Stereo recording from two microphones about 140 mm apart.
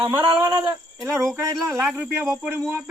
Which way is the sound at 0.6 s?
20° right (ahead or behind).